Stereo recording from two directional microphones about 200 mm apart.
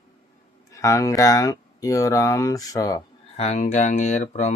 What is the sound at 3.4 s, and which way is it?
Speech, 35° left (ahead or behind).